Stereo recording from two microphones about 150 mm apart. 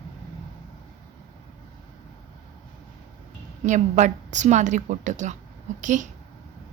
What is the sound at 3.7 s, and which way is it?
A woman's voice, 55° right (ahead or behind).